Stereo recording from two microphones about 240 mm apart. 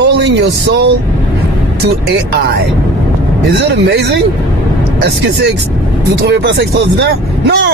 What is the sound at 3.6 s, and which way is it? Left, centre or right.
Speech, right.